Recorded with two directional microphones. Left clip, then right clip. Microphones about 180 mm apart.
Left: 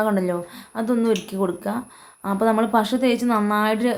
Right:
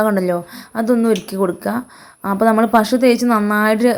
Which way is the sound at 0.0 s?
30° right (ahead or behind).